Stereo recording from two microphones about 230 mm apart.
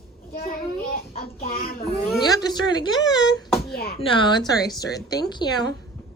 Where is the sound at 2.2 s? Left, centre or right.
Centre.